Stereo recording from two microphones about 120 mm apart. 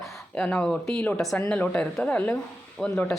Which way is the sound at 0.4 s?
10° left (ahead or behind).